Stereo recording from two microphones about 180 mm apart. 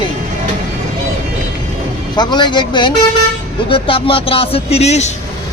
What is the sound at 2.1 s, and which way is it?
Speech, 25° left (ahead or behind).